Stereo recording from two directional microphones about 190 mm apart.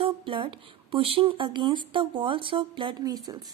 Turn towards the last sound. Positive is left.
turn(degrees=-20)  # may be behind; listen again after turning